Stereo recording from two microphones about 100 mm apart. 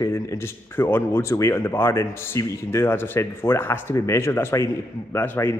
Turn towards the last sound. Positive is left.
turn(degrees=25)  # may be behind; listen again after turning